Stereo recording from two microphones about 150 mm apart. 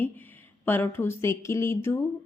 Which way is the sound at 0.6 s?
15° left (ahead or behind).